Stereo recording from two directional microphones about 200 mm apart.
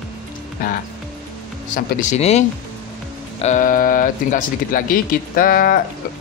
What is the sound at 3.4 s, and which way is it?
Speech, 40° left (ahead or behind).